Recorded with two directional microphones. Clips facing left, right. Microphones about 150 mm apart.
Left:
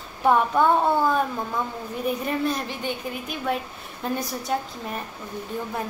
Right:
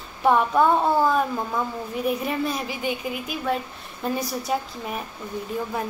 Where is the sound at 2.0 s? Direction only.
Centre (ahead or behind).